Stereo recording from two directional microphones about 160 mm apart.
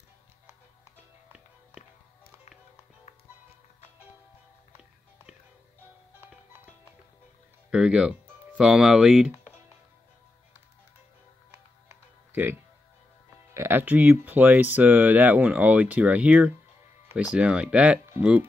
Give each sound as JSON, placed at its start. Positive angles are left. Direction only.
{"t": 7.7, "sound": "speech", "side_deg": -5}
{"t": 13.5, "sound": "speech", "side_deg": -15}